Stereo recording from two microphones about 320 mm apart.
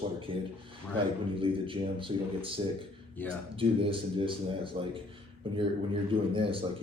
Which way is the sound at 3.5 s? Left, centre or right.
Centre.